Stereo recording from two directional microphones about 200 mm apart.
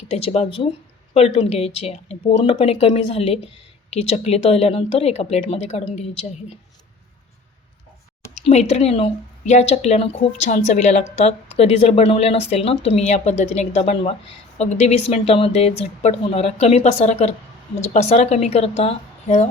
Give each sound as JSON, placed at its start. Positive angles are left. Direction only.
{"t": 0.1, "sound": "speech", "side_deg": 30}
{"t": 8.4, "sound": "a woman's voice", "side_deg": 35}